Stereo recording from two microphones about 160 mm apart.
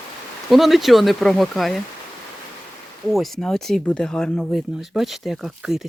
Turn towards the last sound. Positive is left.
turn(degrees=-5)  # may be behind; listen again after turning